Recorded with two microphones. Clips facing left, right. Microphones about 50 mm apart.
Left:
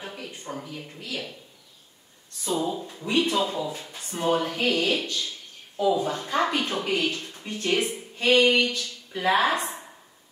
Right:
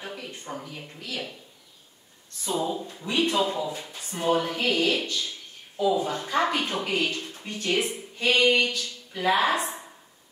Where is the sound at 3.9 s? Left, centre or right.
Centre.